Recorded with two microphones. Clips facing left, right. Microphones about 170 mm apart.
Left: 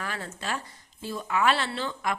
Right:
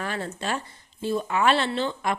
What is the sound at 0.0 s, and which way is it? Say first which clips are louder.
A woman's voice: right 5 dB; 30° right (ahead or behind).